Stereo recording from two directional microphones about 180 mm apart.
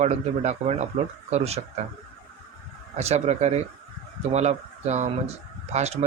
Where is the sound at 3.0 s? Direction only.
35° right (ahead or behind).